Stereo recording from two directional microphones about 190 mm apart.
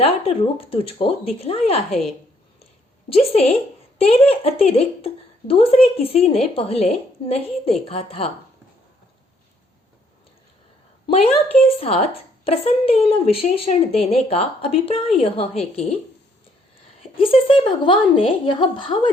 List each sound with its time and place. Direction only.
0.0 s a woman's voice: 30° left (ahead or behind)
1.9 s a woman's voice: centre (ahead or behind)
3.1 s a woman's voice: 30° left (ahead or behind)
12.5 s a woman's voice: 30° left (ahead or behind)
17.0 s a woman's voice: 30° left (ahead or behind)